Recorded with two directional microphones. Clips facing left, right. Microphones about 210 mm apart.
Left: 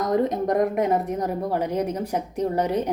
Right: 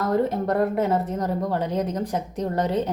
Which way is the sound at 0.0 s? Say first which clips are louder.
Even; 15° left (ahead or behind).